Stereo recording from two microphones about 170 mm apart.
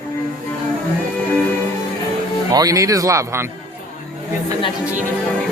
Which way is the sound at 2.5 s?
20° right (ahead or behind).